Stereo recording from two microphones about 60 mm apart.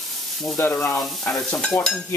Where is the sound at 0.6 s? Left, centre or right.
Left.